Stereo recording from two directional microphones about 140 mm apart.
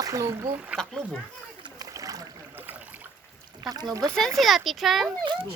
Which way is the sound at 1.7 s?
25° right (ahead or behind).